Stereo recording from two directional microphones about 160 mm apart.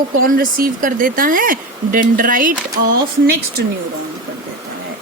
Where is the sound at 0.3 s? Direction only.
65° right (ahead or behind).